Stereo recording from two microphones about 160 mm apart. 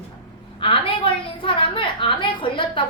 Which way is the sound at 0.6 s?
35° left (ahead or behind).